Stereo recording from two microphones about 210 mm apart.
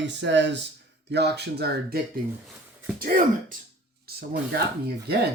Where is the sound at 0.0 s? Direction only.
60° right (ahead or behind).